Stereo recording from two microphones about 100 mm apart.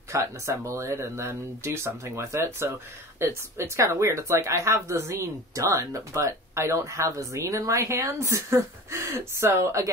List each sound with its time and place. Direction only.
0.1 s speech: 30° right (ahead or behind)